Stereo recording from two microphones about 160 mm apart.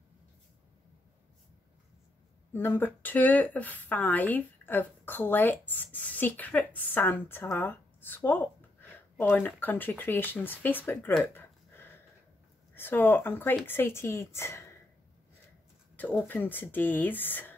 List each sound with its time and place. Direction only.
2.5 s speech: 15° left (ahead or behind)
10.9 s a sound: 10° left (ahead or behind)
12.7 s speech: 15° left (ahead or behind)
16.3 s speech: 10° left (ahead or behind)